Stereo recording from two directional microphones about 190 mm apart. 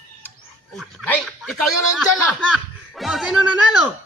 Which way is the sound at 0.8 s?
5° left (ahead or behind).